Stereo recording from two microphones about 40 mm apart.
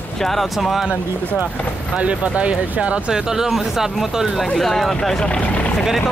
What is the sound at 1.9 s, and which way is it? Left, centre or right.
Speech, right.